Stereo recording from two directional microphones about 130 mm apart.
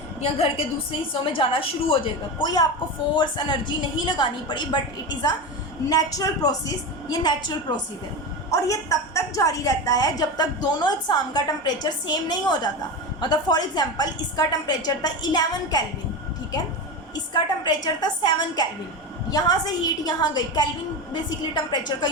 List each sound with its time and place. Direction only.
0.3 s a woman's voice: 45° left (ahead or behind)
8.4 s a woman's voice: 25° left (ahead or behind)
17.3 s a woman's voice: 35° left (ahead or behind)